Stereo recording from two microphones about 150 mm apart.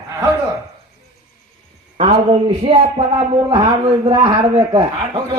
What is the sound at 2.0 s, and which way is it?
A man's voice, 40° right (ahead or behind).